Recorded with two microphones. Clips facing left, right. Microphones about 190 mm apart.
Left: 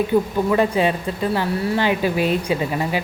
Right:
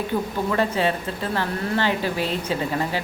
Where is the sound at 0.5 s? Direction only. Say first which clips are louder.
Left 4 dB; 15° left (ahead or behind).